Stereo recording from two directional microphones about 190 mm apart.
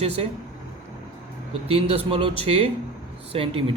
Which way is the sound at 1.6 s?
30° right (ahead or behind).